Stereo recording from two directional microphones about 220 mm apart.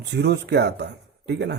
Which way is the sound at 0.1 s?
50° right (ahead or behind).